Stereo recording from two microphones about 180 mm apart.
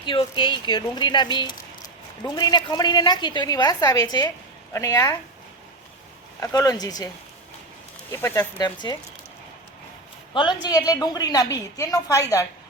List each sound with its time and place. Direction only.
0.0 s a woman's voice: 30° left (ahead or behind)
6.4 s a woman's voice: 20° left (ahead or behind)
8.1 s a woman's voice: 10° left (ahead or behind)
10.3 s a woman's voice: 25° left (ahead or behind)